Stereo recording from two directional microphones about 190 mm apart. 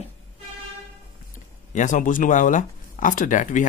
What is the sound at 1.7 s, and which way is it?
Speech, 40° left (ahead or behind).